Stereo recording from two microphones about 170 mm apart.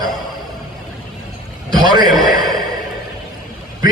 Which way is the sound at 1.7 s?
25° right (ahead or behind).